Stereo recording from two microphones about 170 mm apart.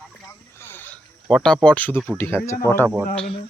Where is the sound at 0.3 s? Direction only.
15° left (ahead or behind).